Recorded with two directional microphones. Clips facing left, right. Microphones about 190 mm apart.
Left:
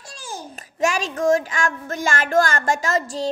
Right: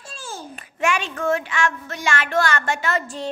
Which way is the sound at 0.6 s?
40° left (ahead or behind).